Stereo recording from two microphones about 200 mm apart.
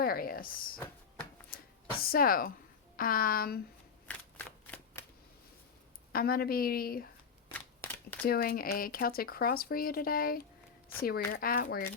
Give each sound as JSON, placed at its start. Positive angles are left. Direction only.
{"t": 0.0, "sound": "speech", "side_deg": 45}
{"t": 2.0, "sound": "speech", "side_deg": 45}
{"t": 4.6, "sound": "shuffling cards", "side_deg": 10}
{"t": 6.1, "sound": "speech", "side_deg": 50}
{"t": 7.5, "sound": "a sound", "side_deg": 5}
{"t": 8.3, "sound": "speech", "side_deg": 45}